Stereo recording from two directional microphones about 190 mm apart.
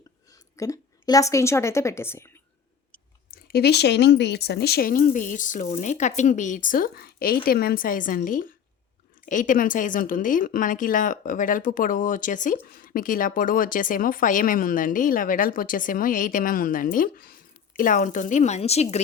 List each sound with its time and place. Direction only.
0.5 s a woman's voice: 15° left (ahead or behind)
3.2 s a woman's voice: 50° left (ahead or behind); by 18.9 s 35° left (ahead or behind)